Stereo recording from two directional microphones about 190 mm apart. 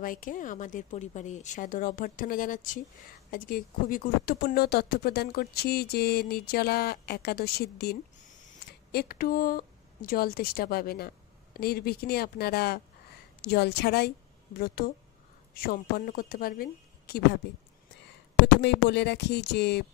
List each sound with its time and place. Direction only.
0.0 s speech: 45° left (ahead or behind)
18.6 s speech: 65° left (ahead or behind)